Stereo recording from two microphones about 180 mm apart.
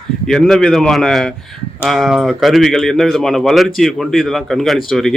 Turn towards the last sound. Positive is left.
turn(degrees=0)  # may be behind; listen again after turning